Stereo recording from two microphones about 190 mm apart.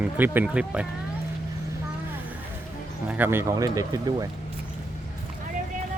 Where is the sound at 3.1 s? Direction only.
10° right (ahead or behind).